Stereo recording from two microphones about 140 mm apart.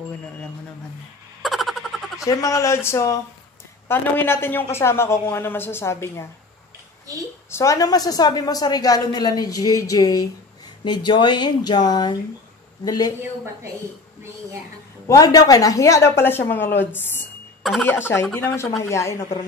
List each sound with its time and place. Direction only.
1.4 s a sound: centre (ahead or behind)
2.2 s a woman's voice: 25° left (ahead or behind)
7.5 s a woman's voice: 25° left (ahead or behind)
15.0 s a woman's voice: 25° left (ahead or behind)